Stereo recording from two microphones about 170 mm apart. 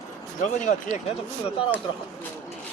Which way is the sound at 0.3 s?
50° left (ahead or behind).